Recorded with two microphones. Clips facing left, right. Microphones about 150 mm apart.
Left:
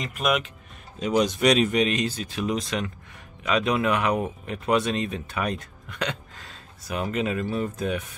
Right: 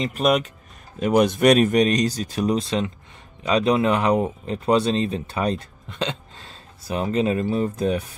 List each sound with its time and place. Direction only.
0.0 s speech: 35° right (ahead or behind)
0.9 s speech: 55° right (ahead or behind); by 8.2 s 35° right (ahead or behind)